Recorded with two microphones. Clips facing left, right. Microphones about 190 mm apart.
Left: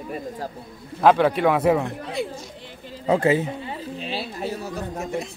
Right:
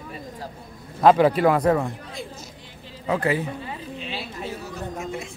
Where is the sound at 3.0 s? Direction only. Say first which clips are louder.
Left 4 dB; 25° left (ahead or behind).